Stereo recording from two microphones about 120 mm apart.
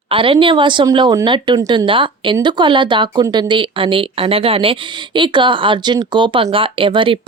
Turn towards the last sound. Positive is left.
turn(degrees=-45)  # may be behind; listen again after turning